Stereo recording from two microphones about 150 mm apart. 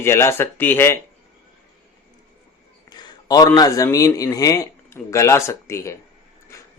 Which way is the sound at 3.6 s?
25° left (ahead or behind).